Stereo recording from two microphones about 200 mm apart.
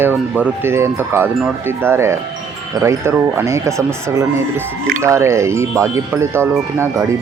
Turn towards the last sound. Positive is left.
turn(degrees=-15)  # may be behind; listen again after turning